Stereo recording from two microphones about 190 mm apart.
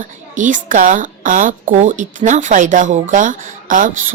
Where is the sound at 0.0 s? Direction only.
40° right (ahead or behind).